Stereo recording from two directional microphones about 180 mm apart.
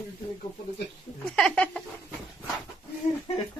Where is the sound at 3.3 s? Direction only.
35° left (ahead or behind).